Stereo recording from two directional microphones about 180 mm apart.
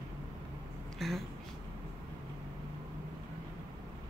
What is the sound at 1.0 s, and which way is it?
Speech, centre (ahead or behind).